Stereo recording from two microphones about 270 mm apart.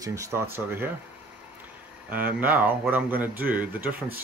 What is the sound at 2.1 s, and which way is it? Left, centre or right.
Speech, centre.